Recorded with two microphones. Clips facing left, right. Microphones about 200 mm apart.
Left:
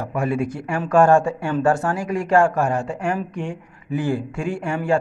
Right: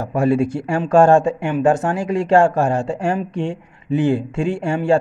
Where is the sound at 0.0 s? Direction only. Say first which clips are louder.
Right 6 dB; 30° right (ahead or behind).